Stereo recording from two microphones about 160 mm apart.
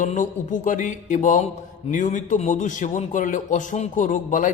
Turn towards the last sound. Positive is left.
turn(degrees=55)  # may be behind; listen again after turning